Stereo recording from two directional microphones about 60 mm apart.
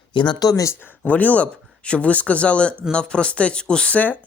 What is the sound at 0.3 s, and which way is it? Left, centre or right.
Speech, left.